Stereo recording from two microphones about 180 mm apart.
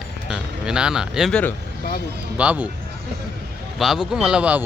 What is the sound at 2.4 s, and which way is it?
Speech, 10° right (ahead or behind).